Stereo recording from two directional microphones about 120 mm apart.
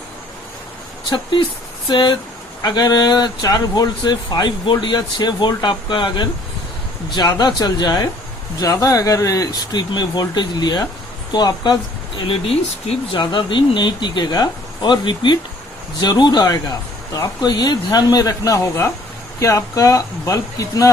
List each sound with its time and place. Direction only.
1.1 s speech: 40° left (ahead or behind)